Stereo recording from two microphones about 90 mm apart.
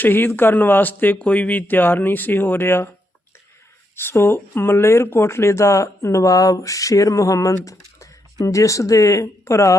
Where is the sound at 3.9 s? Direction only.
25° left (ahead or behind).